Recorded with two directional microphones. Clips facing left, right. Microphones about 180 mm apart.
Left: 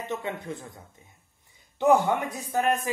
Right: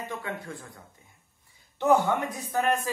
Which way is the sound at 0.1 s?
20° left (ahead or behind).